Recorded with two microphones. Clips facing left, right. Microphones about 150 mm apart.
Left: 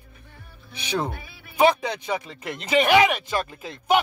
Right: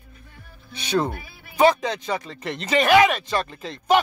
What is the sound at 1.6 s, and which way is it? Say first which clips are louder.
Speech: right 1 dB; 15° left (ahead or behind).